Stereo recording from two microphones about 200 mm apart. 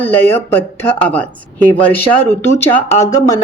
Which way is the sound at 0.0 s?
10° left (ahead or behind).